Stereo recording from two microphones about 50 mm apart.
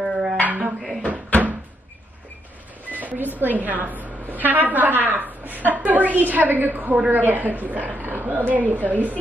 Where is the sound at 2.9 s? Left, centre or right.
Right.